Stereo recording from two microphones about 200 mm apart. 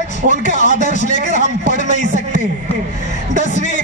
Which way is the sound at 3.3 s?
40° left (ahead or behind).